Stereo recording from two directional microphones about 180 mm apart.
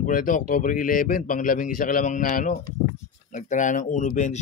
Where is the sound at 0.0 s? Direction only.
45° left (ahead or behind).